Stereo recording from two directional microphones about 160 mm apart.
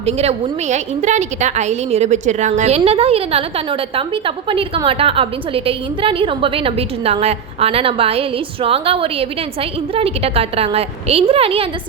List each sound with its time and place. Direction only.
0.0 s a woman's voice: 40° right (ahead or behind)